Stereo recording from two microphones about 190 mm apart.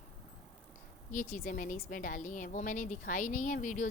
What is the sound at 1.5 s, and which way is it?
A woman's voice, 45° left (ahead or behind).